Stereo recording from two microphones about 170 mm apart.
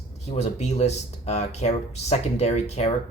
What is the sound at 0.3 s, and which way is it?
Speech, 40° left (ahead or behind).